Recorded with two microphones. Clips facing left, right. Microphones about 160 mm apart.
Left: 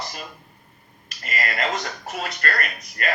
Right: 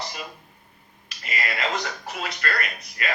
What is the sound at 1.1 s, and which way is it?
Speech, 50° left (ahead or behind).